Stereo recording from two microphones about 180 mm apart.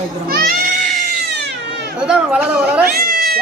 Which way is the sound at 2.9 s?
55° right (ahead or behind).